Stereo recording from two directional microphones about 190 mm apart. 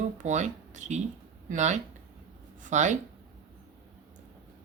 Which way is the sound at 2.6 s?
40° right (ahead or behind).